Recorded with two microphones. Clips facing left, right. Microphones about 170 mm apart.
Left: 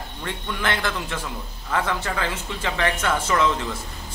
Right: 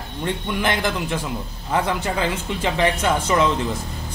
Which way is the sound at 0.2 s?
15° right (ahead or behind).